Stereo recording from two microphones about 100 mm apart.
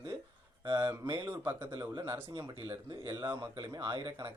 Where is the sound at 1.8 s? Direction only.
40° right (ahead or behind).